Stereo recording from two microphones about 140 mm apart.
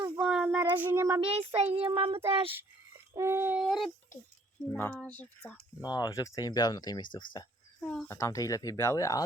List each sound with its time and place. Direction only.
0.2 s child singing: 5° right (ahead or behind)
1.2 s child singing: 40° right (ahead or behind)
3.2 s a sound: 15° right (ahead or behind)
3.6 s speech: centre (ahead or behind)
4.6 s speech: 15° left (ahead or behind)
5.8 s speech: 30° left (ahead or behind)
8.0 s speech: 20° left (ahead or behind)